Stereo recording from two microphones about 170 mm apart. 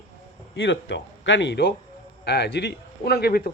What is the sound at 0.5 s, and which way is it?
A man's voice, 90° left.